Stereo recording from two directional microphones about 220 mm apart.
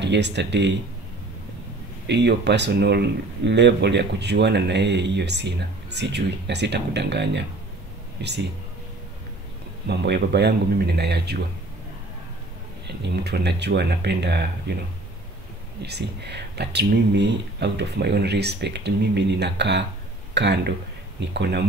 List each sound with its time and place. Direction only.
0.0 s speech: 50° right (ahead or behind)
2.0 s speech: 50° right (ahead or behind)
9.8 s speech: 50° right (ahead or behind)
12.8 s speech: 50° right (ahead or behind)
15.8 s speech: 50° right (ahead or behind)